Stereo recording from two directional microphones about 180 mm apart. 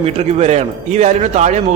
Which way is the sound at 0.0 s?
35° right (ahead or behind).